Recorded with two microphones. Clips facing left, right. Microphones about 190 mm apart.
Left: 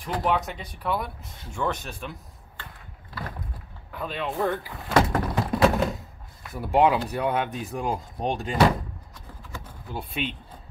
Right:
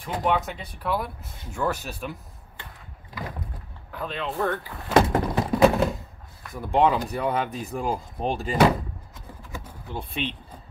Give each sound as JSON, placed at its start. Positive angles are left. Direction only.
{"t": 0.0, "sound": "speech", "side_deg": 0}
{"t": 3.9, "sound": "speech", "side_deg": 5}
{"t": 5.6, "sound": "thunk", "side_deg": 0}
{"t": 6.5, "sound": "speech", "side_deg": 5}
{"t": 9.8, "sound": "speech", "side_deg": 5}